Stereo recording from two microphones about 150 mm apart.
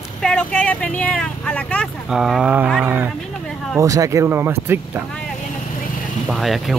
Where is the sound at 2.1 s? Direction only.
5° right (ahead or behind).